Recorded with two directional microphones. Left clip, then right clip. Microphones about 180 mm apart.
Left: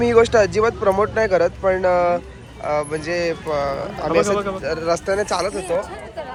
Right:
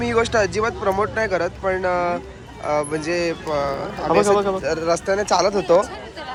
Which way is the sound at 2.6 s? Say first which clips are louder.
Even; 20° right (ahead or behind).